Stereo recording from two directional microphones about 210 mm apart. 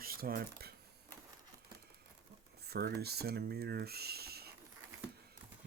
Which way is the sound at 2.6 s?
50° right (ahead or behind).